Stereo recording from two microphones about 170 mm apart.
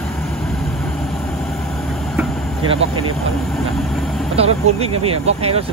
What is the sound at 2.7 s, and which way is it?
Vehicle, 35° right (ahead or behind).